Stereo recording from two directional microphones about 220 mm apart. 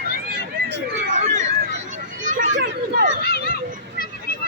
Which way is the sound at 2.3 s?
35° right (ahead or behind).